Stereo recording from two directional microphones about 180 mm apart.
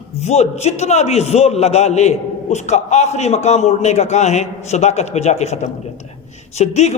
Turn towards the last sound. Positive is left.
turn(degrees=35)  # may be behind; listen again after turning